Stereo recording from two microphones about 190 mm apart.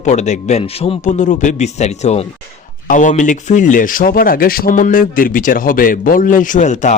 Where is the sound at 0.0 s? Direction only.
40° left (ahead or behind).